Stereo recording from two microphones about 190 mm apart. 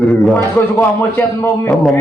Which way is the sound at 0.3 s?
10° left (ahead or behind).